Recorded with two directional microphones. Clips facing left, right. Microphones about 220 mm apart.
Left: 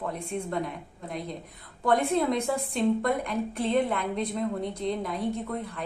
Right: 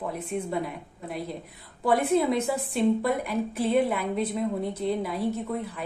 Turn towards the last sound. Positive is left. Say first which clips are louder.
# right 2 dB
turn(degrees=-5)  # may be behind; listen again after turning